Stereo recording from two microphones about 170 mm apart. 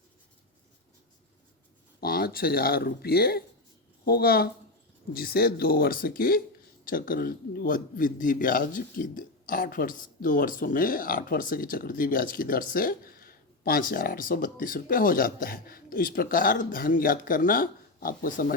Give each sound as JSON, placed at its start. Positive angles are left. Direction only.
{"t": 2.0, "sound": "a man's voice", "side_deg": 65}